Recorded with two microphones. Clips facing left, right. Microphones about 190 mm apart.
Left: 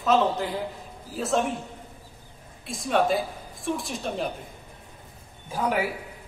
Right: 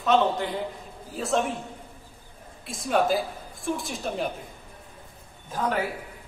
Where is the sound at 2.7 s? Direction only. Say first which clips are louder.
Even; centre (ahead or behind).